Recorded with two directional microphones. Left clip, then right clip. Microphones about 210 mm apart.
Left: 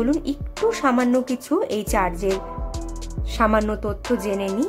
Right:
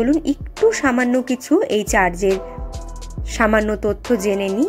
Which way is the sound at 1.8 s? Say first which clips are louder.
Right 5 dB; 15° right (ahead or behind).